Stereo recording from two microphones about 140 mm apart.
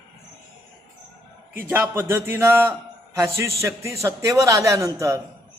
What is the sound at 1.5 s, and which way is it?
A man's voice, 20° right (ahead or behind).